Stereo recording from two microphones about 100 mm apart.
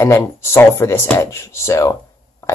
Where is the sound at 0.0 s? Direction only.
25° left (ahead or behind).